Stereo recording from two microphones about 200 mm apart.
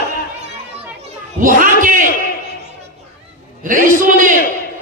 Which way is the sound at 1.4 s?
40° right (ahead or behind).